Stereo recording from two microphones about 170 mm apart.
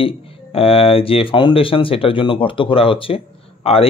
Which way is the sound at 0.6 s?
35° left (ahead or behind).